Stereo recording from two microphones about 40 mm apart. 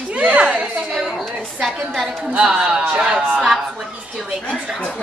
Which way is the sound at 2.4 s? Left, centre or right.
Centre.